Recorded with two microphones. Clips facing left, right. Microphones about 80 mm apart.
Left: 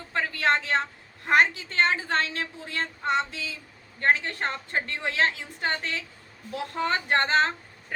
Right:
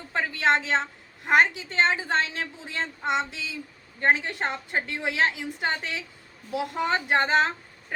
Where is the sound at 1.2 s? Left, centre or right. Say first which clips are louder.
Right 1 dB; centre.